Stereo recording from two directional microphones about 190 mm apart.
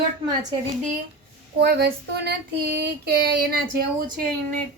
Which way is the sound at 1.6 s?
60° right (ahead or behind).